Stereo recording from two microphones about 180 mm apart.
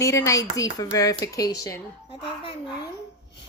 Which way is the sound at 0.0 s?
15° left (ahead or behind).